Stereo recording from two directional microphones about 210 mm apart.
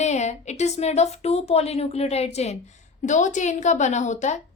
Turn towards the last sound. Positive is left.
turn(degrees=35)  # may be behind; listen again after turning